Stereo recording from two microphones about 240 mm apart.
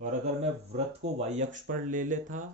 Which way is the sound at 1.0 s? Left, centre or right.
Right.